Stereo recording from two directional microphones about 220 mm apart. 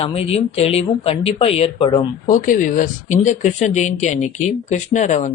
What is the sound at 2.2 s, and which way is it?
Speech, 35° left (ahead or behind).